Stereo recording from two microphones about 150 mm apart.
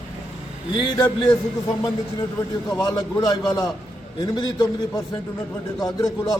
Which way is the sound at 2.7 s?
25° left (ahead or behind).